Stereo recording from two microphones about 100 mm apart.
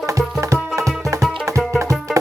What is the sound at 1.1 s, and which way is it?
Music, 30° right (ahead or behind).